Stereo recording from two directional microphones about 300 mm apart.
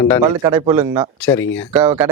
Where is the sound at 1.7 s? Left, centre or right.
Centre.